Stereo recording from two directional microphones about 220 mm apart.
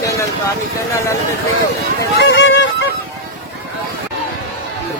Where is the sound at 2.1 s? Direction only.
55° left (ahead or behind).